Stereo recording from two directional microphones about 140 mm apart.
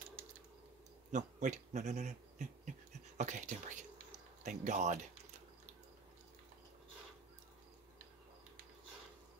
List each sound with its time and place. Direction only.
1.1 s speech: 60° right (ahead or behind)